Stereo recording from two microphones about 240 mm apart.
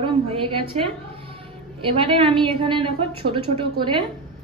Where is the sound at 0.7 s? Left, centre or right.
Right.